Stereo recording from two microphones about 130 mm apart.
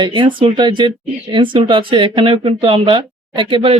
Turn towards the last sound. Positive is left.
turn(degrees=-45)  # may be behind; listen again after turning